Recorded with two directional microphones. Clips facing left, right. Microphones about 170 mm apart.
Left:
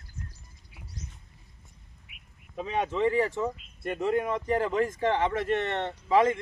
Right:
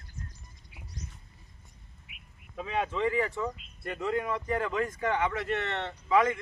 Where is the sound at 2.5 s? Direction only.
20° left (ahead or behind).